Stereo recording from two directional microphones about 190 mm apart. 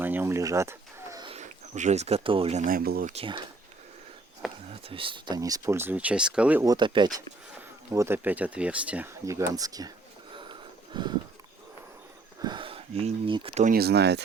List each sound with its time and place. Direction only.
0.0 s bird: 10° right (ahead or behind)
1.3 s speech: 40° right (ahead or behind)
2.6 s speech: 50° right (ahead or behind)
3.1 s speech: 30° right (ahead or behind)
4.7 s speech: 30° right (ahead or behind); by 6.7 s 5° right (ahead or behind)
6.7 s speech: 25° right (ahead or behind)
7.9 s speech: 10° right (ahead or behind)
10.3 s a sound: 25° right (ahead or behind)
12.4 s speech: 25° right (ahead or behind)
13.7 s speech: 55° right (ahead or behind)